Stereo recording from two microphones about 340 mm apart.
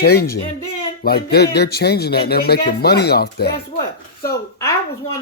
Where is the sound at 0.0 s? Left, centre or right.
Left.